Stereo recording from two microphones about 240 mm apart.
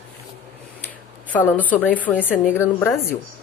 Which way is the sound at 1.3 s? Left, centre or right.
Centre.